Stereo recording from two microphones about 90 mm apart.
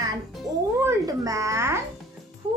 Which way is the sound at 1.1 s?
40° right (ahead or behind).